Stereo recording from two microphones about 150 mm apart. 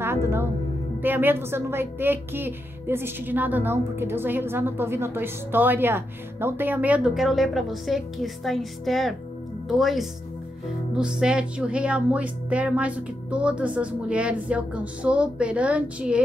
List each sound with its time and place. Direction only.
0.0 s music: 15° right (ahead or behind)
1.0 s a woman's voice: 15° right (ahead or behind)